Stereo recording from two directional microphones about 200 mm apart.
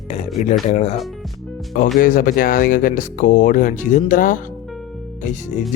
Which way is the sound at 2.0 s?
45° left (ahead or behind).